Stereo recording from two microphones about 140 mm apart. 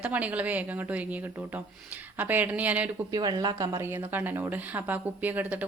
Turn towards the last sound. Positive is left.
turn(degrees=-10)  # may be behind; listen again after turning